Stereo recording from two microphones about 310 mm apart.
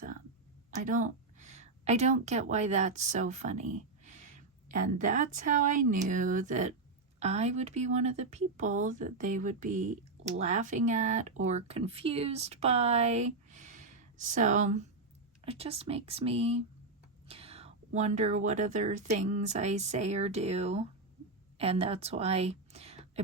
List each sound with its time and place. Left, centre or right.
0.8 s a woman's voice: right